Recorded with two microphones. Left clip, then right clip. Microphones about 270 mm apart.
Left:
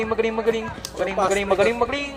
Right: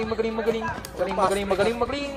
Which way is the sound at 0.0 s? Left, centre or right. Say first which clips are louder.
Left 4 dB; left.